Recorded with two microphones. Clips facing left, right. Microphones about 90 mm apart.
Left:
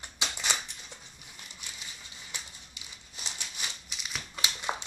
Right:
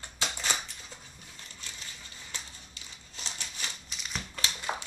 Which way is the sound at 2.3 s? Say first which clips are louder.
Even; 15° left (ahead or behind).